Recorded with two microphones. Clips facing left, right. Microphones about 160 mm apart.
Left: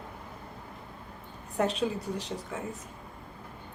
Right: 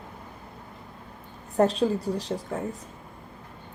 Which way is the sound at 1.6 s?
35° right (ahead or behind).